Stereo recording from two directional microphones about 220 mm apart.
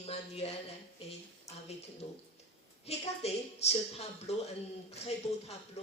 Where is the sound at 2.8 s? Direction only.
30° left (ahead or behind).